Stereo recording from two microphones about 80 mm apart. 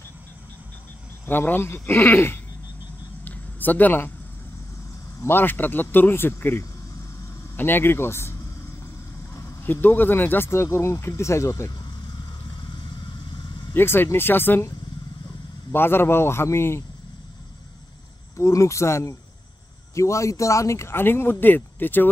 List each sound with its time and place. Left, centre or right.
1.2 s speech: left
3.3 s a sound: left
5.2 s speech: left
9.6 s speech: left
13.7 s speech: left
15.7 s speech: left
18.3 s speech: left